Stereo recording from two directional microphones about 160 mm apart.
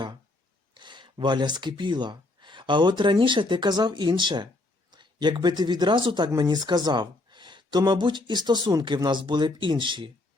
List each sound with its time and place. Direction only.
0.7 s speech: 30° right (ahead or behind)